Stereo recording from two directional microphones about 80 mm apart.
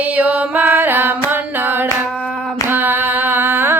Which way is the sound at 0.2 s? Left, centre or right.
Centre.